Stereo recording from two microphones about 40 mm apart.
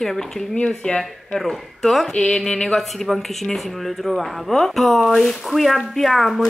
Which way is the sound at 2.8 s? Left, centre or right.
Centre.